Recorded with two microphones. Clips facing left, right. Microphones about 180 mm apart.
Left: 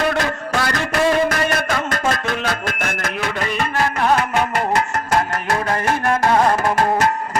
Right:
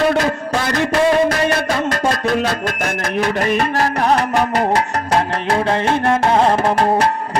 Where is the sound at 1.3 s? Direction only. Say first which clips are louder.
Right 3 dB; 30° right (ahead or behind).